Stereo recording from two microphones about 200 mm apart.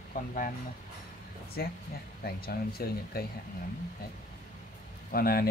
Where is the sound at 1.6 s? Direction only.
50° left (ahead or behind).